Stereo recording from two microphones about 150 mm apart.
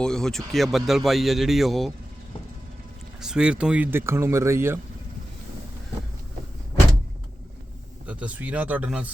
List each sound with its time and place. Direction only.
0.0 s a man's voice: 5° left (ahead or behind)
3.2 s speech: 5° right (ahead or behind)
8.0 s speech: 10° right (ahead or behind)